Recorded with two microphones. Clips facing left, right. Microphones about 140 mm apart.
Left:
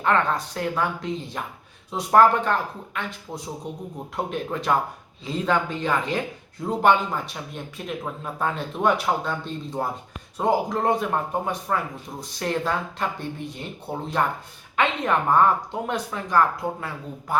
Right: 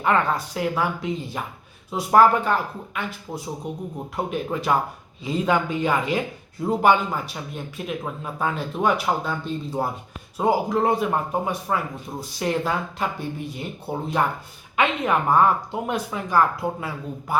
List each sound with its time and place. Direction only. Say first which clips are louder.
0.0 s speech: right 1 dB; 10° right (ahead or behind)